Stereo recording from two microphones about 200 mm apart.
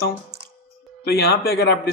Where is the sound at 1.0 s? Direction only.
50° left (ahead or behind).